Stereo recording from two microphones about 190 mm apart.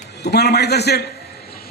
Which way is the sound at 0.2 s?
60° left (ahead or behind).